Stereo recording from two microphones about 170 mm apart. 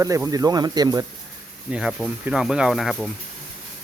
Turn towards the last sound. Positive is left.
turn(degrees=0)  # may be behind; listen again after turning